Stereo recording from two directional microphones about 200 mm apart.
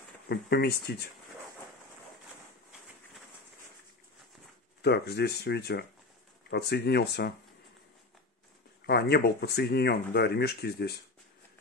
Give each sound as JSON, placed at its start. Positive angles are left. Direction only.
{"t": 0.3, "sound": "speech", "side_deg": 55}
{"t": 4.8, "sound": "speech", "side_deg": 55}
{"t": 8.8, "sound": "speech", "side_deg": 55}